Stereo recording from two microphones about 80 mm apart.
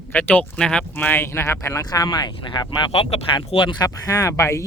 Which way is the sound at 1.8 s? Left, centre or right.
Left.